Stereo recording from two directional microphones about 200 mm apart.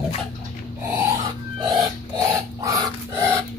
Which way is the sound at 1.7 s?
15° right (ahead or behind).